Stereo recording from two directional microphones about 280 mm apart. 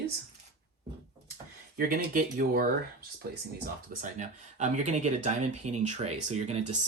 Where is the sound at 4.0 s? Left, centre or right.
Right.